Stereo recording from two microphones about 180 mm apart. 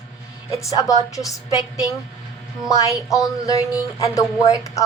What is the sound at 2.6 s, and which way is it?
A woman's voice, 20° left (ahead or behind).